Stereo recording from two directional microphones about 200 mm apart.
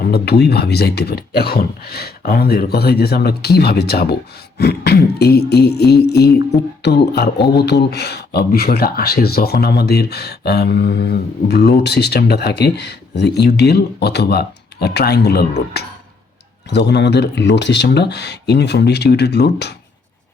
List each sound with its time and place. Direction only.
0.0 s speech: 55° left (ahead or behind)